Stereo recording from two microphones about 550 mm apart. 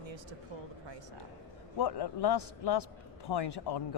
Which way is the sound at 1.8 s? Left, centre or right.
Left.